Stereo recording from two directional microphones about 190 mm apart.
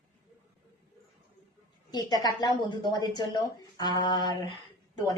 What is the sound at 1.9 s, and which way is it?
A woman's voice, 20° left (ahead or behind).